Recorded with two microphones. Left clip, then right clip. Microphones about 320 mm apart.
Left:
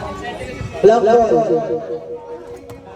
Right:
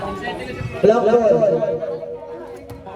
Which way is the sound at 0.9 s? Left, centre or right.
Left.